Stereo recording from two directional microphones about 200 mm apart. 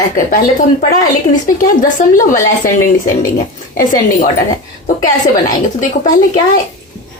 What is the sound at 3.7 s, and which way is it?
Speech, 45° left (ahead or behind).